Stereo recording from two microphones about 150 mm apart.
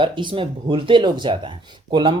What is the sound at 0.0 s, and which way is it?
Speech, 35° right (ahead or behind).